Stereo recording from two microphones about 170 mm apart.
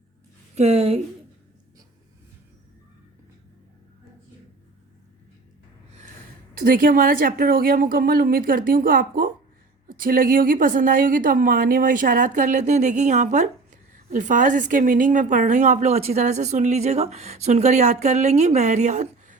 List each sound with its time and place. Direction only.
0.5 s speech: 40° right (ahead or behind)
6.5 s a woman's voice: 55° right (ahead or behind)